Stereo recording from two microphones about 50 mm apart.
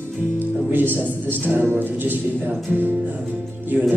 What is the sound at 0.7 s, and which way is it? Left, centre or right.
A man's voice, right.